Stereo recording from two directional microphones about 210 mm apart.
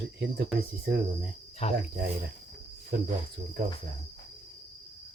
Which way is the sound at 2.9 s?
45° right (ahead or behind).